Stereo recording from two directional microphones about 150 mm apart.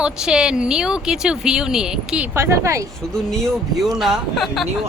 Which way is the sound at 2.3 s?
20° right (ahead or behind).